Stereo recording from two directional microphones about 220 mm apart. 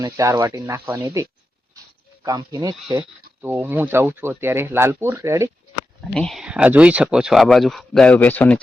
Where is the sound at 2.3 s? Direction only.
15° right (ahead or behind).